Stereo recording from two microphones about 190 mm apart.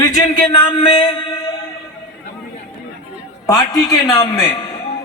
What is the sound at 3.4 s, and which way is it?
A man's voice, 15° left (ahead or behind).